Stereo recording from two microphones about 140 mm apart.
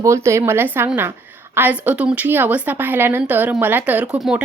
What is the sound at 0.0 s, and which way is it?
Speech, 20° right (ahead or behind).